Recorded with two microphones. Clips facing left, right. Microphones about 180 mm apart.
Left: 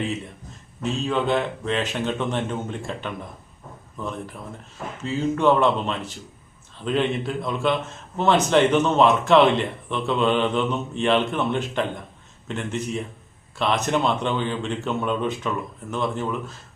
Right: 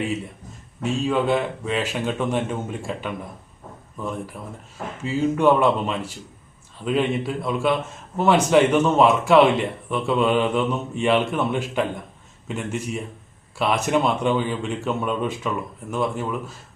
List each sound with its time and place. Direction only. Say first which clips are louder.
0.8 s speech: right 2 dB; 5° right (ahead or behind)
5.0 s a man's voice: right 2 dB; 10° right (ahead or behind)